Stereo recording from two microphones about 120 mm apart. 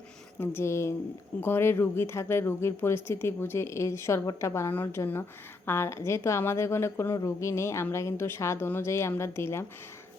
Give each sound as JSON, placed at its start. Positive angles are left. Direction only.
{"t": 0.3, "sound": "speech", "side_deg": 20}